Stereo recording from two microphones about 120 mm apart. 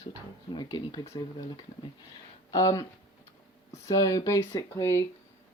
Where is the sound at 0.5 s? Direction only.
40° left (ahead or behind).